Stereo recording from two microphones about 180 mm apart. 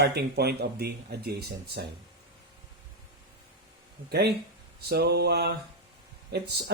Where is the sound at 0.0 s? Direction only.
65° right (ahead or behind).